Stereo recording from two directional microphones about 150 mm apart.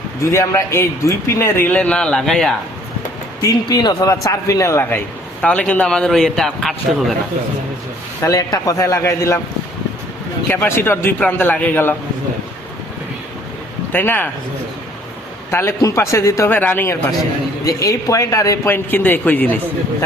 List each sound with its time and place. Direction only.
0.2 s a man's voice: 20° left (ahead or behind); by 2.6 s 5° left (ahead or behind)
3.4 s a man's voice: 25° left (ahead or behind); by 7.1 s centre (ahead or behind)
8.2 s speech: 25° left (ahead or behind)
10.5 s a man's voice: 15° left (ahead or behind)
13.9 s a man's voice: 15° left (ahead or behind)
15.4 s speech: 20° left (ahead or behind)